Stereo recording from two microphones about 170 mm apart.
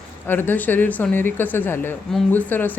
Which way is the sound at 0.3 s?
10° left (ahead or behind).